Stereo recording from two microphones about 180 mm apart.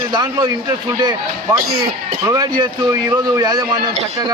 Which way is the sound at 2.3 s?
20° right (ahead or behind).